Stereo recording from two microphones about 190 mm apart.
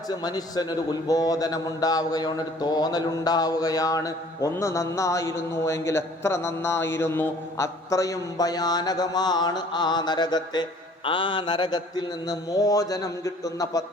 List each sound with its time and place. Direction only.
0.1 s a man's voice: 20° left (ahead or behind)